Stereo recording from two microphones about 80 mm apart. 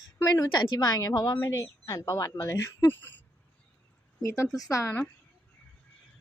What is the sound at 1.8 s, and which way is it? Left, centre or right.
Speech, left.